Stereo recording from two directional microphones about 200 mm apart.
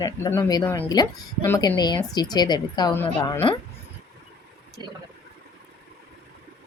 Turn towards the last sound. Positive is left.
turn(degrees=-20)  # may be behind; listen again after turning